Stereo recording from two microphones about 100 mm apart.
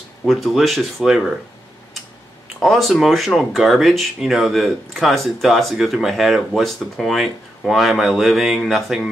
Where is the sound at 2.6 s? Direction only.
Centre (ahead or behind).